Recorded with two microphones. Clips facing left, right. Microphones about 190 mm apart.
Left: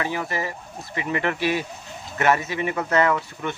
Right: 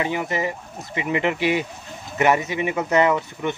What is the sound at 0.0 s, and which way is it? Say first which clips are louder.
A man's voice: right 3 dB; 20° right (ahead or behind).